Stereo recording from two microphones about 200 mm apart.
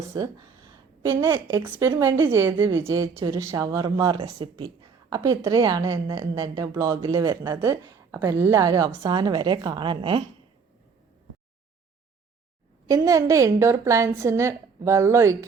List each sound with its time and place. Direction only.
0.1 s a woman's voice: 20° right (ahead or behind)
12.9 s a woman's voice: 15° right (ahead or behind)